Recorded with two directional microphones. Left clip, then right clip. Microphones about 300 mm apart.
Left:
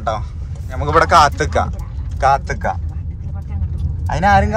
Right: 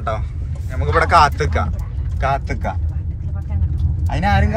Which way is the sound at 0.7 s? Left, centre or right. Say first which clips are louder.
Left 2 dB; centre.